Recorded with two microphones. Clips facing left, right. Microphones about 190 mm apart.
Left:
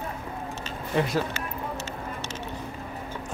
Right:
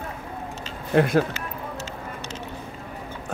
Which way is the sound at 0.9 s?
60° right (ahead or behind).